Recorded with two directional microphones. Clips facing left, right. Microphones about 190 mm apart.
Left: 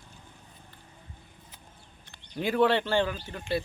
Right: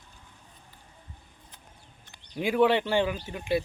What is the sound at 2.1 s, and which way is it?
Speech, 10° right (ahead or behind).